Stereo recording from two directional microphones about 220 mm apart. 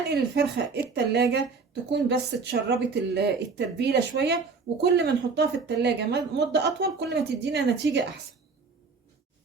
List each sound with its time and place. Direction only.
0.1 s a woman's voice: 45° right (ahead or behind)